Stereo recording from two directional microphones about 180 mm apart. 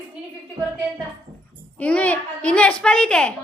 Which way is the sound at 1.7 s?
5° left (ahead or behind).